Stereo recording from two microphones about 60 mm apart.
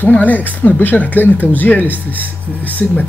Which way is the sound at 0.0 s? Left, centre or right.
Left.